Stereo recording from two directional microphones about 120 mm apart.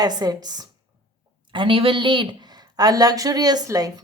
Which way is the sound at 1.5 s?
45° right (ahead or behind).